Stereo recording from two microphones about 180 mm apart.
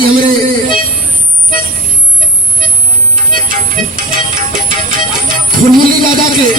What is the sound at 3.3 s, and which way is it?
Music, 50° right (ahead or behind).